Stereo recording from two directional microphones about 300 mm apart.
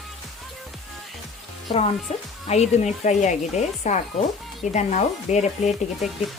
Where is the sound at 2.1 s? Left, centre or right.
Centre.